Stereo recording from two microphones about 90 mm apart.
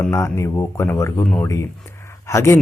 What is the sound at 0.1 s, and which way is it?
Speech, 30° left (ahead or behind).